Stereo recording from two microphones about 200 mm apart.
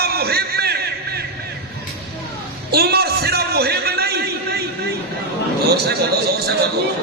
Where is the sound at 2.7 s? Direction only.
50° right (ahead or behind).